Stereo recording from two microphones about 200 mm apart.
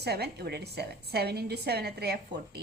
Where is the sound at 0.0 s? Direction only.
55° right (ahead or behind).